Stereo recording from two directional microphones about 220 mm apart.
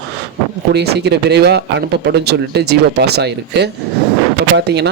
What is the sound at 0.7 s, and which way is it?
Speech, 50° right (ahead or behind).